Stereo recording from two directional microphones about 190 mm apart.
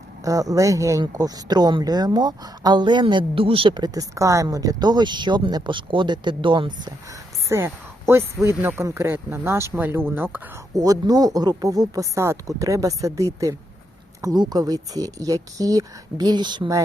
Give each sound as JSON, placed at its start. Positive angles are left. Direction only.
{"t": 0.3, "sound": "speech", "side_deg": -20}
{"t": 7.4, "sound": "speech", "side_deg": -15}